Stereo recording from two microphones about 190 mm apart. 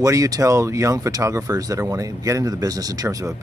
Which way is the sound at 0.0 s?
15° right (ahead or behind).